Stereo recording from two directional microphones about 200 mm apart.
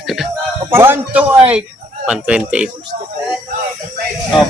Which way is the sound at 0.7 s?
10° right (ahead or behind).